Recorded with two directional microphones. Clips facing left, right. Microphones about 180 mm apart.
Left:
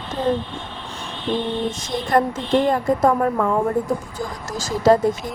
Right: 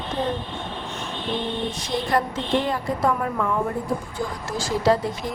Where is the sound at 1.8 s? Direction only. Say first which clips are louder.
Left 4 dB; 50° left (ahead or behind).